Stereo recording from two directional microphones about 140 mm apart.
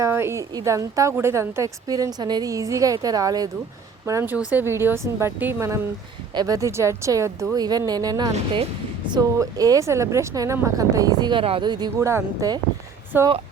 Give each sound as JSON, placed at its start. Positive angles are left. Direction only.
{"t": 0.0, "sound": "a woman's voice", "side_deg": -20}
{"t": 11.9, "sound": "a woman's voice", "side_deg": -20}